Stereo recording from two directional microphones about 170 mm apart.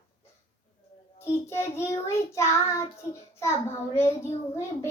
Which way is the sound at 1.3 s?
15° left (ahead or behind).